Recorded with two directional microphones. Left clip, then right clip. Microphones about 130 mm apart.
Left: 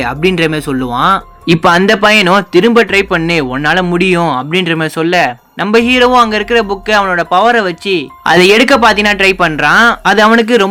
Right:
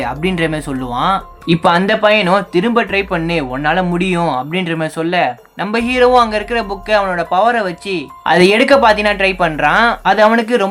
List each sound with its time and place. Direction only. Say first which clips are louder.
0.0 s speech: left 5 dB; 35° left (ahead or behind)